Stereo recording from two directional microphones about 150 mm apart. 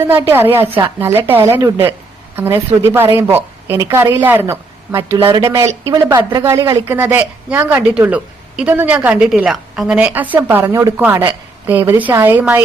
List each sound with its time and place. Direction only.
0.1 s speech: 15° right (ahead or behind)